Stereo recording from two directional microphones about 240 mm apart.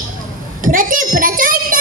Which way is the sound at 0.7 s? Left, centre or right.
Right.